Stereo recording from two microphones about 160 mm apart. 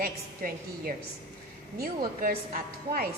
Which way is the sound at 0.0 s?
65° right (ahead or behind).